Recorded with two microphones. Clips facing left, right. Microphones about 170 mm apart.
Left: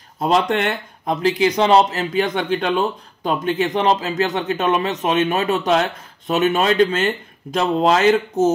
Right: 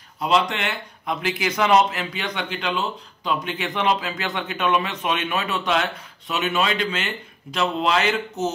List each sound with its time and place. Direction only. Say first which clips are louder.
0.2 s speech: left 4 dB; 45° left (ahead or behind)
1.2 s speech: left 7 dB; 30° left (ahead or behind)